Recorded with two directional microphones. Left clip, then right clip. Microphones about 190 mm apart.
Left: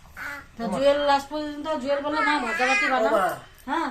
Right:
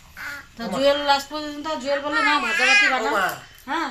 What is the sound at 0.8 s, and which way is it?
A woman's voice, 25° right (ahead or behind).